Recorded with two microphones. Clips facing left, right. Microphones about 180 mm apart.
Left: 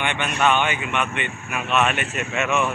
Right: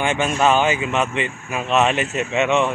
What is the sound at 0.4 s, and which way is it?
Speech, 35° right (ahead or behind).